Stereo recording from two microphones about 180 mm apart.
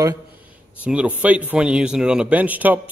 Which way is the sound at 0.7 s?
5° right (ahead or behind).